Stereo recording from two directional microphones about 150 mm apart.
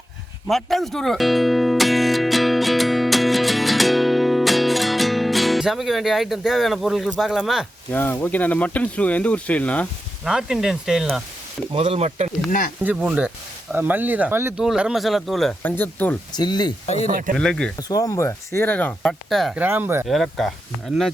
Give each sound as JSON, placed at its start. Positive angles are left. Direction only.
{"t": 0.4, "sound": "music", "side_deg": 0}
{"t": 7.9, "sound": "speech", "side_deg": 15}
{"t": 10.2, "sound": "speech", "side_deg": -5}
{"t": 11.9, "sound": "speech", "side_deg": -45}
{"t": 12.5, "sound": "speech", "side_deg": 60}
{"t": 12.8, "sound": "speech", "side_deg": -10}
{"t": 14.6, "sound": "speech", "side_deg": -5}
{"t": 15.6, "sound": "speech", "side_deg": 10}
{"t": 16.3, "sound": "speech", "side_deg": 30}
{"t": 17.1, "sound": "speech", "side_deg": -65}
{"t": 17.3, "sound": "speech", "side_deg": 5}
{"t": 17.7, "sound": "speech", "side_deg": 25}
{"t": 19.5, "sound": "speech", "side_deg": -15}
{"t": 20.1, "sound": "speech", "side_deg": 0}